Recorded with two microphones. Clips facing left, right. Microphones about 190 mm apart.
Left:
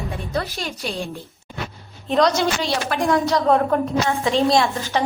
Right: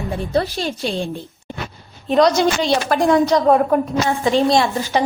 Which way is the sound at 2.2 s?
20° right (ahead or behind).